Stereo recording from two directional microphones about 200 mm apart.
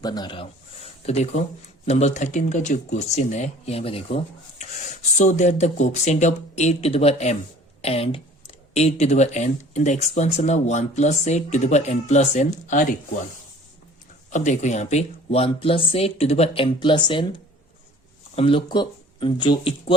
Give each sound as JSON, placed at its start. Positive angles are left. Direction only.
{"t": 0.0, "sound": "speech", "side_deg": 20}
{"t": 14.3, "sound": "speech", "side_deg": 35}
{"t": 18.3, "sound": "speech", "side_deg": 25}